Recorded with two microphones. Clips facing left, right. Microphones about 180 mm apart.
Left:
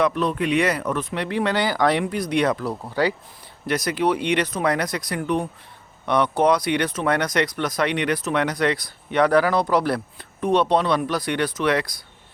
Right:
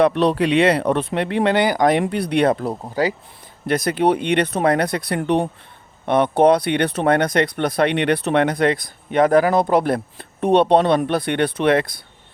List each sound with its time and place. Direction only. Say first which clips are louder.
0.2 s speech: right 5 dB; 85° right
0.6 s speech: right 6 dB; 30° right (ahead or behind)
2.0 s speech: right 4 dB; 65° right (ahead or behind)
2.5 s speech: right 4 dB; 25° right (ahead or behind)
3.7 s speech: right 4 dB; 55° right (ahead or behind)
6.1 s speech: right 4 dB; 50° right (ahead or behind)
9.1 s speech: right 3 dB; 20° right (ahead or behind)
10.2 s speech: right 5 dB; 60° right (ahead or behind)